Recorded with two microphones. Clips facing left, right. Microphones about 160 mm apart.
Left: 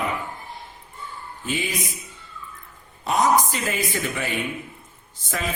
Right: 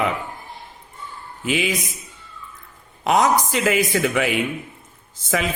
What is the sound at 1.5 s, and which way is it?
Speech, 90° right.